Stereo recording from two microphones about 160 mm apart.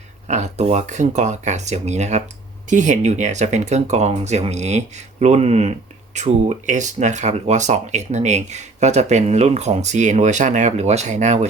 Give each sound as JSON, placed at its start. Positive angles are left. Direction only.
{"t": 0.3, "sound": "speech", "side_deg": -45}